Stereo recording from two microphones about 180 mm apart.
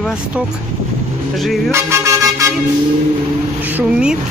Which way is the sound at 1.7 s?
15° right (ahead or behind).